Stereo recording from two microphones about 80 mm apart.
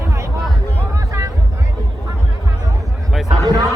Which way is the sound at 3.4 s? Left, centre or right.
Right.